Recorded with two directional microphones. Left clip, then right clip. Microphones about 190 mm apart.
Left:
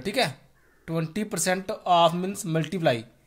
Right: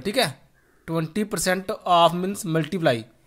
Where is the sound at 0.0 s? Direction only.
25° right (ahead or behind).